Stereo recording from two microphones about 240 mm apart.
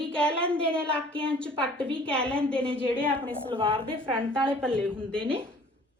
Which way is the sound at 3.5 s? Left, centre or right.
Right.